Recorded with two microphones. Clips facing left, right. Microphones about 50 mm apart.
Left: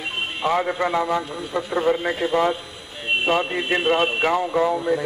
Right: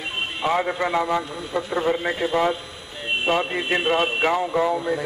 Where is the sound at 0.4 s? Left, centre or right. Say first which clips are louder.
Left 1 dB; centre.